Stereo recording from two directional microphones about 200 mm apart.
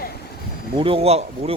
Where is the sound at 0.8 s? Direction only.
25° right (ahead or behind).